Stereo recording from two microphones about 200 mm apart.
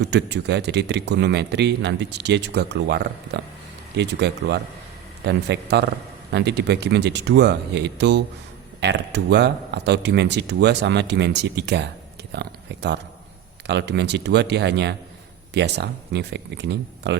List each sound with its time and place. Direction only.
0.0 s a man's voice: 60° right (ahead or behind)